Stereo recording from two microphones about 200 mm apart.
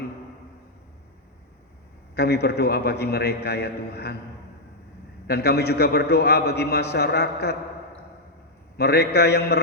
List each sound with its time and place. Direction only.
2.1 s a man's voice: 55° left (ahead or behind)
5.3 s a man's voice: 55° left (ahead or behind)
8.8 s a man's voice: 55° left (ahead or behind)